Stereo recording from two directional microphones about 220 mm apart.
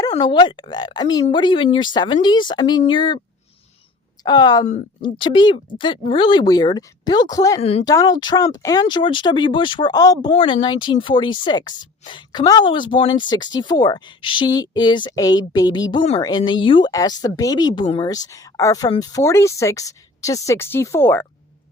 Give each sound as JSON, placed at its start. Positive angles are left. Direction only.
{"t": 0.1, "sound": "speech", "side_deg": 20}
{"t": 4.2, "sound": "a woman's voice", "side_deg": 20}
{"t": 7.6, "sound": "speech", "side_deg": 30}
{"t": 7.9, "sound": "speech", "side_deg": 15}